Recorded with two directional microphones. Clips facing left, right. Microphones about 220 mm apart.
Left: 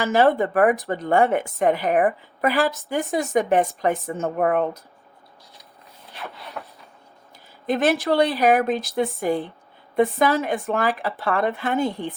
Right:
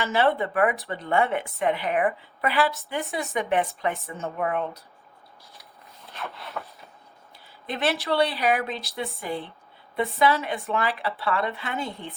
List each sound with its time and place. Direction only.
0.0 s a woman's voice: 45° left (ahead or behind)
6.1 s a sound: centre (ahead or behind)
7.7 s a woman's voice: 45° left (ahead or behind)
11.9 s speech: centre (ahead or behind)